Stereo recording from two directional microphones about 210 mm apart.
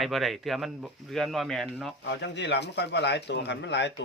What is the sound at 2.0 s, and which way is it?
A man's voice, 55° left (ahead or behind).